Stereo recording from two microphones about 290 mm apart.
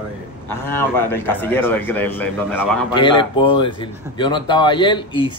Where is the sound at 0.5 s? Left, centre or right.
Centre.